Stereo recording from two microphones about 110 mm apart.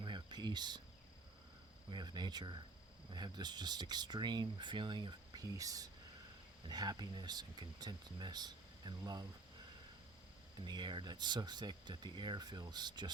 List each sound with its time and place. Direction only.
0.0 s cricket: 45° right (ahead or behind)
1.9 s speech: 40° right (ahead or behind)
5.5 s speech: 30° right (ahead or behind)
10.7 s speech: 45° right (ahead or behind)